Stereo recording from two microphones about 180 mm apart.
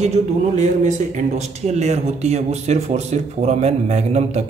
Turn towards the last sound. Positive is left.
turn(degrees=-35)  # may be behind; listen again after turning